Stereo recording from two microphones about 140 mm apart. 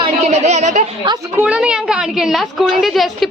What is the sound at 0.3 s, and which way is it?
Speech, 55° right (ahead or behind).